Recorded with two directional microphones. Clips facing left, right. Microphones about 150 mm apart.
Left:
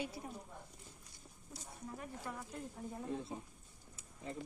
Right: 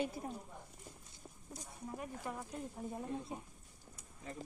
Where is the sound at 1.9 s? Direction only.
20° right (ahead or behind).